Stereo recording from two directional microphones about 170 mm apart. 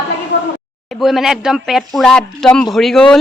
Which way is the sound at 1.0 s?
Centre (ahead or behind).